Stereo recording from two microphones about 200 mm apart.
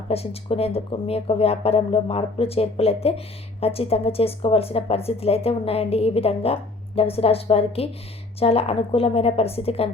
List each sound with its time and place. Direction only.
0.1 s speech: 30° left (ahead or behind)